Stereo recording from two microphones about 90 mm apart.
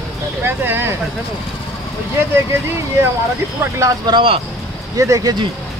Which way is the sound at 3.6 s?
35° right (ahead or behind).